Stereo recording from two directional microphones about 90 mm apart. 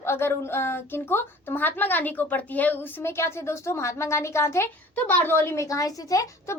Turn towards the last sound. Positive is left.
turn(degrees=40)  # may be behind; listen again after turning